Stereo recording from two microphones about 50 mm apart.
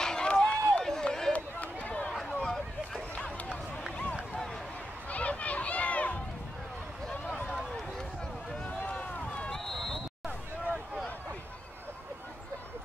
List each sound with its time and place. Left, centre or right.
0.0 s run: centre
1.3 s run: left
2.4 s boat: centre
5.1 s a sound: left
8.6 s run: left
9.5 s run: centre
10.2 s a sound: right